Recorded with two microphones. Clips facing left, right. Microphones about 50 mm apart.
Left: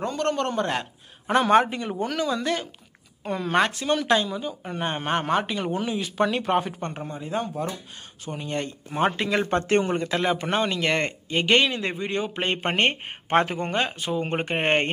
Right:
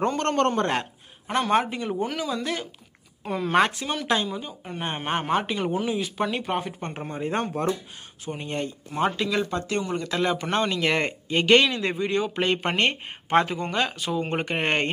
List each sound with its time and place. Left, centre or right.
0.0 s speech: right
1.2 s speech: centre
2.0 s speech: centre
7.0 s speech: right
8.3 s speech: centre
9.0 s speech: left
9.5 s speech: left
10.0 s speech: centre
12.5 s speech: left
13.7 s speech: left